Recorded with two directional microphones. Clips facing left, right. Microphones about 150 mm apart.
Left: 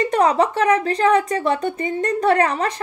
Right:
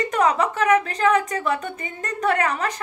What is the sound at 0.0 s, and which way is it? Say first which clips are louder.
A woman's voice: left 3 dB; 35° left (ahead or behind).